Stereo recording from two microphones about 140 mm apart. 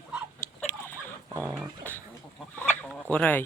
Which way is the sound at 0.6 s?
10° left (ahead or behind).